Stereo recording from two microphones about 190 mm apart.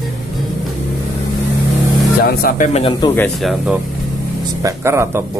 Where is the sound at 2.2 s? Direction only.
50° left (ahead or behind).